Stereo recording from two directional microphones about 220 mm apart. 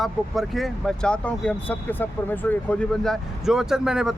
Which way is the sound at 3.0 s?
Centre (ahead or behind).